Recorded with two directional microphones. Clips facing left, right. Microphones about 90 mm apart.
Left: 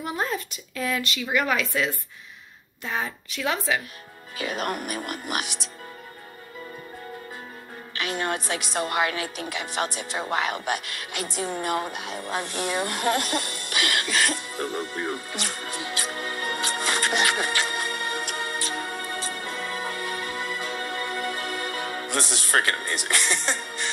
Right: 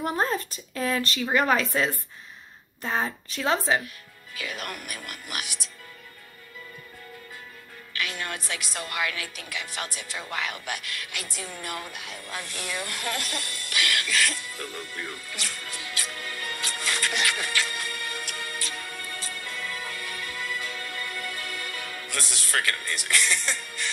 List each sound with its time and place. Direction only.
0.0 s a woman's voice: 35° right (ahead or behind)
4.4 s speech: 30° left (ahead or behind)
7.9 s a woman's voice: 30° left (ahead or behind)
10.1 s a sound: 35° left (ahead or behind)